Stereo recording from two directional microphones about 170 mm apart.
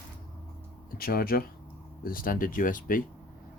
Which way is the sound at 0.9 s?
60° left (ahead or behind).